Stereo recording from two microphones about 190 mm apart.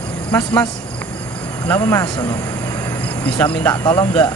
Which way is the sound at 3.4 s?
10° left (ahead or behind).